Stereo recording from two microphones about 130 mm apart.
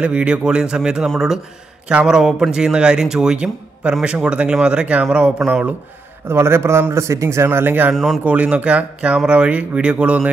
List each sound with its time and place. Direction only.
0.0 s speech: 10° right (ahead or behind)
6.2 s a man's voice: 20° right (ahead or behind)
7.9 s speech: centre (ahead or behind)